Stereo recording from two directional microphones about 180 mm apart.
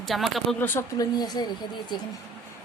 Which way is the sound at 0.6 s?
15° left (ahead or behind).